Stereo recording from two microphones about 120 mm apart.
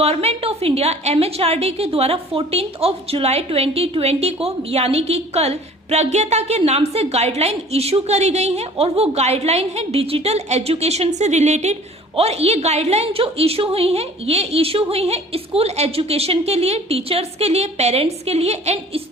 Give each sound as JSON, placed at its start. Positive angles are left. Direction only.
{"t": 0.0, "sound": "a woman's voice", "side_deg": -55}
{"t": 11.2, "sound": "a woman's voice", "side_deg": -75}